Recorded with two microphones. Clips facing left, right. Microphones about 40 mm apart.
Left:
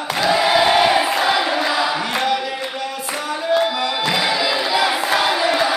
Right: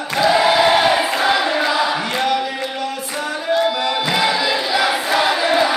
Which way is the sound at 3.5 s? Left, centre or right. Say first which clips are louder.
Right 1 dB; centre.